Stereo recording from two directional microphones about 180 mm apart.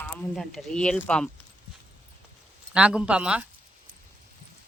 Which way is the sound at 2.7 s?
5° right (ahead or behind).